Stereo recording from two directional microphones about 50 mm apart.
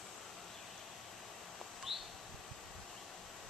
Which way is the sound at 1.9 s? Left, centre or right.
Centre.